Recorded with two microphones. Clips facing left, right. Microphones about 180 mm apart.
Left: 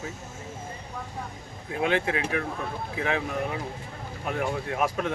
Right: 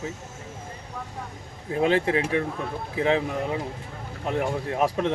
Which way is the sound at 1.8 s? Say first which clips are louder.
Right 4 dB; 30° right (ahead or behind).